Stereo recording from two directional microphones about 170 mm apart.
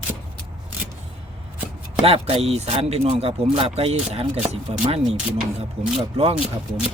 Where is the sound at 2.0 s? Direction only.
35° right (ahead or behind).